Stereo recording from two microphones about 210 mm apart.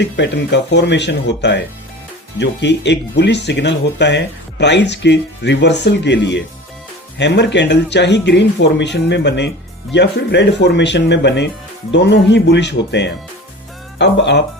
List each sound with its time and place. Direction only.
0.0 s speech: 55° left (ahead or behind)